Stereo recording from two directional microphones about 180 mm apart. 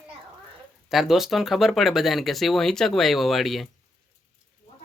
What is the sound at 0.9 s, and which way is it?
Speech, centre (ahead or behind).